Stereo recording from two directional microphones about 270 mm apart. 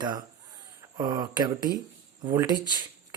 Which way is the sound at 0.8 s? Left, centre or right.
Centre.